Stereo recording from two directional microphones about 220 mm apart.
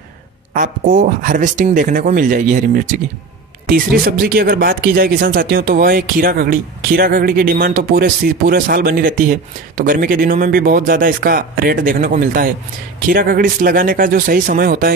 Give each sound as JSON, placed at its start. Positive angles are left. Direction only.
{"t": 0.6, "sound": "speech", "side_deg": -35}